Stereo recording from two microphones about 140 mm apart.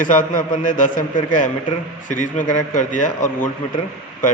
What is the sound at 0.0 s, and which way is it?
A man's voice, 70° left (ahead or behind).